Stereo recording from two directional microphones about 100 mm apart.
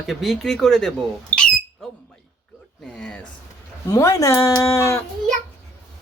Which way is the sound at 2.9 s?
10° left (ahead or behind).